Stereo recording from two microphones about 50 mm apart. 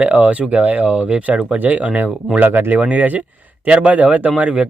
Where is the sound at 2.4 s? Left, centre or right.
Right.